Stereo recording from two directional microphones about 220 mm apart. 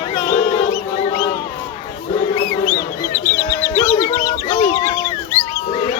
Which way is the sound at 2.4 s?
30° left (ahead or behind).